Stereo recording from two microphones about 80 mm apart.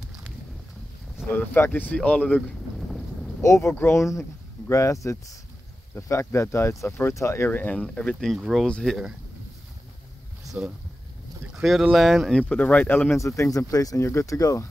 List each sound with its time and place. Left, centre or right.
1.3 s speech: left
3.4 s speech: left
7.4 s speech: centre
8.6 s speech: centre
11.5 s boat: centre
11.9 s speech: centre
12.4 s speech: centre
13.4 s speech: left